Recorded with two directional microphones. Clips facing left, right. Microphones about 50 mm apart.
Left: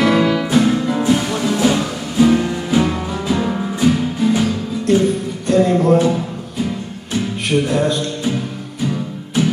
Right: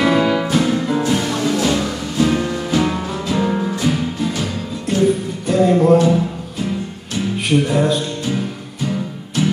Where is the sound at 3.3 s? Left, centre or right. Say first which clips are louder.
Right 1 dB; centre.